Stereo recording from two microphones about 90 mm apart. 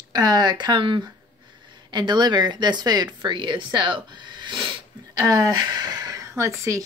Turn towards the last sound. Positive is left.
turn(degrees=-35)  # may be behind; listen again after turning